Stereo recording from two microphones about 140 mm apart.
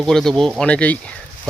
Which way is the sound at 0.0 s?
5° left (ahead or behind).